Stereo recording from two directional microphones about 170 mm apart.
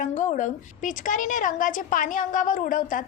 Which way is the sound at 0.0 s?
50° left (ahead or behind).